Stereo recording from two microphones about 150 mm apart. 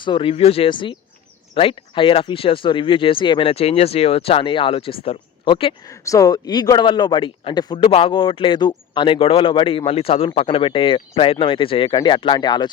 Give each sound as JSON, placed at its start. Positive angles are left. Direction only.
{"t": 0.0, "sound": "a man's voice", "side_deg": 35}
{"t": 5.8, "sound": "a man's voice", "side_deg": 20}